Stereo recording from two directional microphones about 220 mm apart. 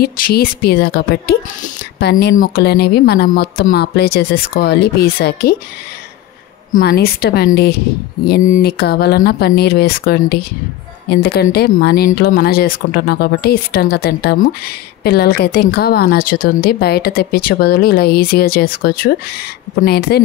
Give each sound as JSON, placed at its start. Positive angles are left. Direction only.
{"t": 0.0, "sound": "a woman's voice", "side_deg": 45}
{"t": 6.7, "sound": "a woman's voice", "side_deg": 40}